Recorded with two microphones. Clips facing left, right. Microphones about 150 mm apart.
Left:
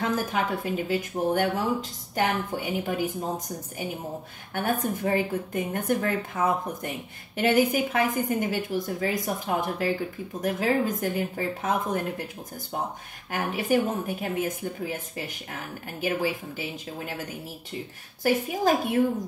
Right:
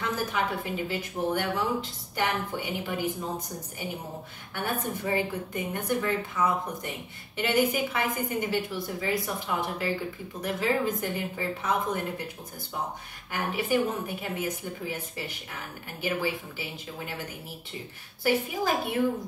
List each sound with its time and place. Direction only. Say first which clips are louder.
0.0 s speech: left 3 dB; 50° left (ahead or behind)
4.6 s speech: left 4 dB; 45° left (ahead or behind)
13.3 s speech: left 2 dB; 45° left (ahead or behind)
18.5 s speech: left 4 dB; 45° left (ahead or behind)